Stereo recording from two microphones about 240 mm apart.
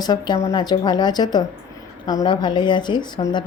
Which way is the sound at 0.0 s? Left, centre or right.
Centre.